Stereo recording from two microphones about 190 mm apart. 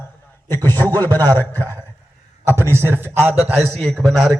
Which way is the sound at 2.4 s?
15° right (ahead or behind).